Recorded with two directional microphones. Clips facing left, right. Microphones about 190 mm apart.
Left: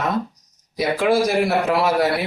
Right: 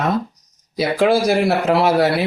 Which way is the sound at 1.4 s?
25° right (ahead or behind).